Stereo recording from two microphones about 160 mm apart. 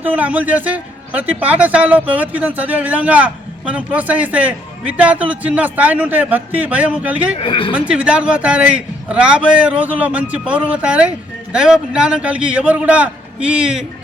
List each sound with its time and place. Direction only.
0.0 s a man's voice: 10° right (ahead or behind)
7.3 s speech: 35° left (ahead or behind)
7.7 s a man's voice: 5° right (ahead or behind)